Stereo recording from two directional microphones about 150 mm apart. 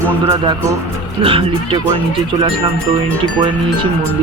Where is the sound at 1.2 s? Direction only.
35° right (ahead or behind).